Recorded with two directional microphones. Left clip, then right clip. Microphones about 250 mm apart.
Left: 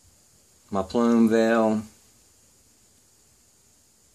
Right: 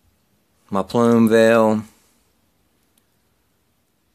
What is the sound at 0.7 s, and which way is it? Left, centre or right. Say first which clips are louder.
Speech: right 6 dB; right.